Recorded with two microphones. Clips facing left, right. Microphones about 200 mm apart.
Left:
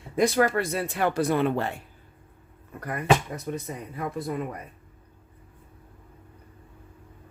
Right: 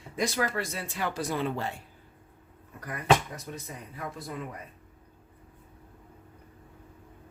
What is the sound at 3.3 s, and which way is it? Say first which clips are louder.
Speech: left 8 dB; 55° left (ahead or behind).